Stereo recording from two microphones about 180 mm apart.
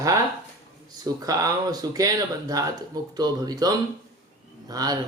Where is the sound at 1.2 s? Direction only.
20° right (ahead or behind).